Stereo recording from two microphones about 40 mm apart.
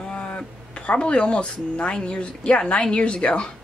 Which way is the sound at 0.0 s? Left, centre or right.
Centre.